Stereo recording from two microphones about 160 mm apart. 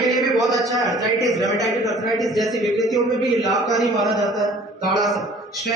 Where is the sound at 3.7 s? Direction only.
Centre (ahead or behind).